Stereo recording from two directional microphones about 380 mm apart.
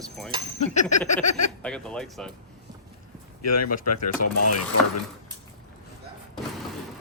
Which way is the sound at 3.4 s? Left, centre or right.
Left.